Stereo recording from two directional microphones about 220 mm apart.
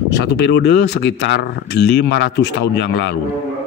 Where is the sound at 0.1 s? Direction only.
50° left (ahead or behind).